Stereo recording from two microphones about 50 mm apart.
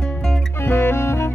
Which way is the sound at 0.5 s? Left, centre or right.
Left.